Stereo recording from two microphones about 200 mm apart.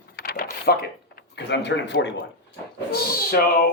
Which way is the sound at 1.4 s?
60° left (ahead or behind).